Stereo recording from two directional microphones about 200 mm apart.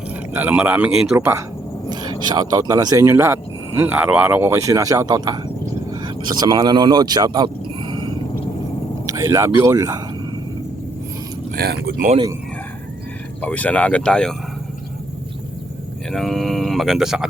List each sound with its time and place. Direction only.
0.3 s speech: 10° right (ahead or behind)
9.1 s speech: 15° right (ahead or behind)
11.5 s speech: 50° right (ahead or behind)
13.4 s speech: 5° left (ahead or behind)
16.1 s speech: centre (ahead or behind)